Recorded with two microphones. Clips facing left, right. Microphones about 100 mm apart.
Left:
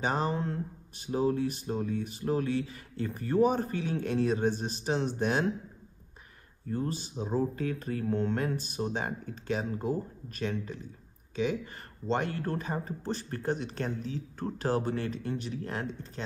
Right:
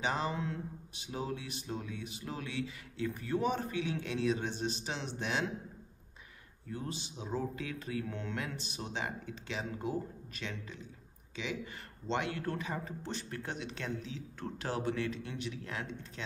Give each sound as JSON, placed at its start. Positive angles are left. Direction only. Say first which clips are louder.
{"t": 0.0, "sound": "speech", "louder": "left 4 dB", "side_deg": 45}
{"t": 6.7, "sound": "speech", "louder": "left 8 dB", "side_deg": 45}